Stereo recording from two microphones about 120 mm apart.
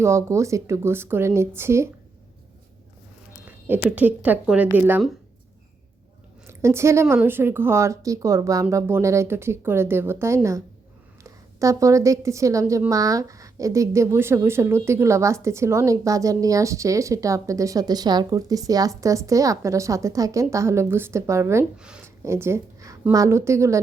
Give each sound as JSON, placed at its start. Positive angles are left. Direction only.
{"t": 0.0, "sound": "a woman's voice", "side_deg": -25}
{"t": 3.4, "sound": "speech", "side_deg": -15}
{"t": 6.5, "sound": "a woman's voice", "side_deg": -25}
{"t": 21.8, "sound": "speech", "side_deg": -5}
{"t": 22.0, "sound": "a sound", "side_deg": -20}
{"t": 23.1, "sound": "a woman's voice", "side_deg": -25}